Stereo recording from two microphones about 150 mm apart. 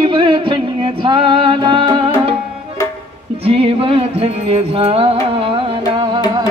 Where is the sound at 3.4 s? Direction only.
40° right (ahead or behind).